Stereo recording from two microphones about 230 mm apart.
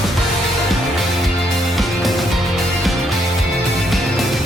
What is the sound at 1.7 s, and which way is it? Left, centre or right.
Music, centre.